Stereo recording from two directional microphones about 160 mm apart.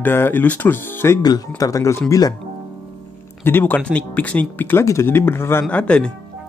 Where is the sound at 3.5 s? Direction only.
10° left (ahead or behind).